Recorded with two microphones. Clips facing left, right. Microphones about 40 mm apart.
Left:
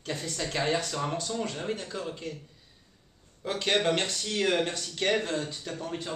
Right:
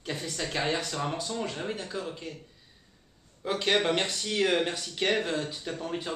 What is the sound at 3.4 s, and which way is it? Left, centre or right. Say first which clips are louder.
Speech: right 1 dB; centre.